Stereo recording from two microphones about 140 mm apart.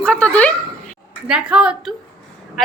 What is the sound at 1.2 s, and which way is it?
Speech, 5° right (ahead or behind).